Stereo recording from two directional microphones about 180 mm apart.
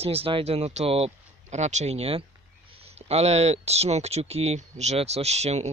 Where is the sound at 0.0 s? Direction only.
35° right (ahead or behind).